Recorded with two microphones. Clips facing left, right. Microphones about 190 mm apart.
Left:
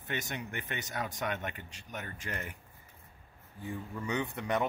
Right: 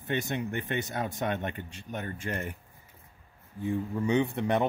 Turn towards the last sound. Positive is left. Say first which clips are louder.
# right 6 dB
turn(degrees=-25)  # may be behind; listen again after turning